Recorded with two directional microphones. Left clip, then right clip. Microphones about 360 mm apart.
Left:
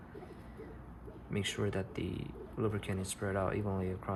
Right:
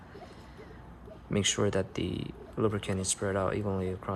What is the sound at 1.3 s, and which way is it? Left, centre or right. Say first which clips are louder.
Speech: right 8 dB; centre.